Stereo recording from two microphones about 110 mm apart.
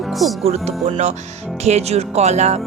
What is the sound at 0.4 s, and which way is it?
Speech, 75° right (ahead or behind).